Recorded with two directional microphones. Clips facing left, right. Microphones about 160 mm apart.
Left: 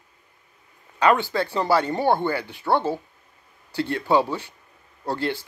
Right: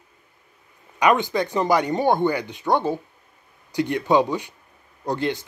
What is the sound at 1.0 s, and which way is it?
Speech, 15° right (ahead or behind).